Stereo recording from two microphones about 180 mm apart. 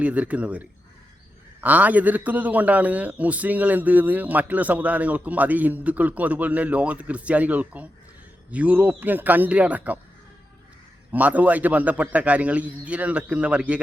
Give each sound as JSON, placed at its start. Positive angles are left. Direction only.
{"t": 0.0, "sound": "a man's voice", "side_deg": -10}
{"t": 11.1, "sound": "a man's voice", "side_deg": -10}